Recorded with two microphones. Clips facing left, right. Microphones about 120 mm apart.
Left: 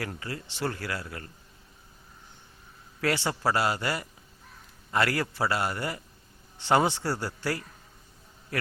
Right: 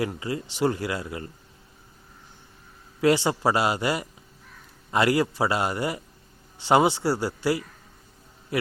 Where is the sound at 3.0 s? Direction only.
15° right (ahead or behind).